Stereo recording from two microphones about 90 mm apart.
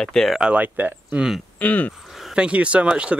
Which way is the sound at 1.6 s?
20° left (ahead or behind).